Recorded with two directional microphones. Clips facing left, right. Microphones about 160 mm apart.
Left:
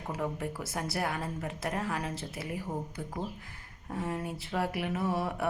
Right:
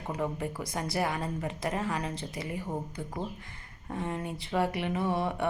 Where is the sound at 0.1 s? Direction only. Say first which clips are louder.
Right 2 dB; centre (ahead or behind).